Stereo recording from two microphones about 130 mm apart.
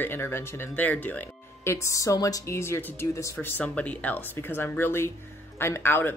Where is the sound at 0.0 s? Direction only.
20° left (ahead or behind).